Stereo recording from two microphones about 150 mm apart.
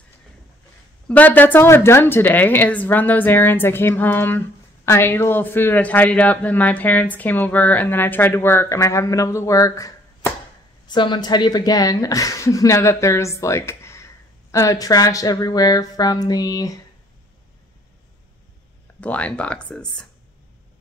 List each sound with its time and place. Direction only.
1.0 s speech: 10° left (ahead or behind)
18.9 s speech: 10° left (ahead or behind)